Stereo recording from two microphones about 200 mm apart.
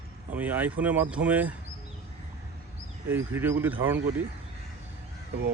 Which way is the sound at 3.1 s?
10° right (ahead or behind).